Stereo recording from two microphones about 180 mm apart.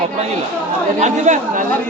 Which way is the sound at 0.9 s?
40° right (ahead or behind).